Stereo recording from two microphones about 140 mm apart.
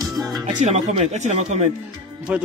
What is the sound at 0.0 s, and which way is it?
Music, 25° right (ahead or behind).